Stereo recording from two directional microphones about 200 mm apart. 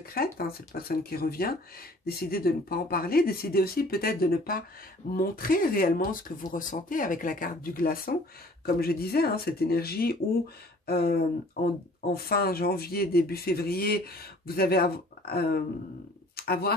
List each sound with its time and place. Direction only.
0.0 s speech: 50° left (ahead or behind)